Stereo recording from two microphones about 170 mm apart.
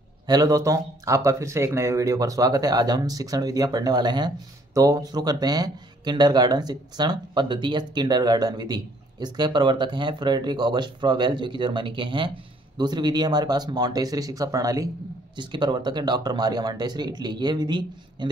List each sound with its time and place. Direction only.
0.3 s speech: 20° right (ahead or behind)